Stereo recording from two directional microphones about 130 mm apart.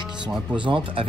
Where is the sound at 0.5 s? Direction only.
40° right (ahead or behind).